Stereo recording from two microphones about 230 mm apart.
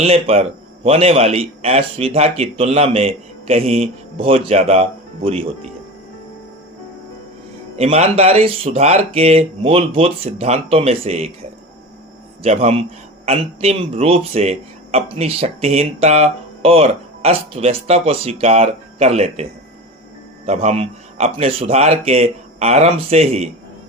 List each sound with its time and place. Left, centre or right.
0.0 s speech: right
7.8 s speech: right
12.4 s speech: right